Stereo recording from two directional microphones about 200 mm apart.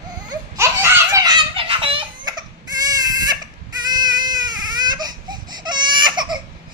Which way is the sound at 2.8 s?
20° right (ahead or behind).